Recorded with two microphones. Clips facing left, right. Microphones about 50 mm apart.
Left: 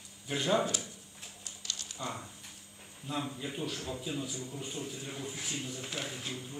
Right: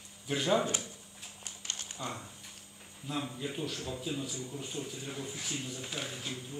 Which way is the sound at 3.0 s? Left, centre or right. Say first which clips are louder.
Even; centre.